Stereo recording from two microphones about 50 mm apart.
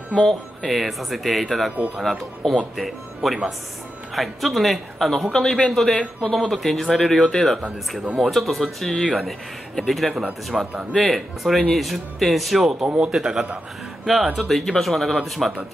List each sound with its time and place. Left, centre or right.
0.1 s a man's voice: centre
12.8 s a man's voice: centre